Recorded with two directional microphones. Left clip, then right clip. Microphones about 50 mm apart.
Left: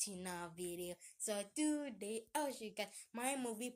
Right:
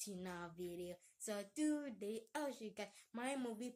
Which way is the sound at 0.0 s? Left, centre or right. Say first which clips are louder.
Left 3 dB; right.